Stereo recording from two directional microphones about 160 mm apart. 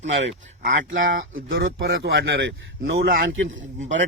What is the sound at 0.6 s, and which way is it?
Speech, 60° right (ahead or behind).